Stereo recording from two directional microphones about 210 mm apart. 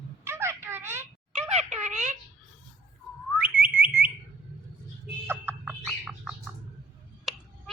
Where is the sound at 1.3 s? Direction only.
35° right (ahead or behind).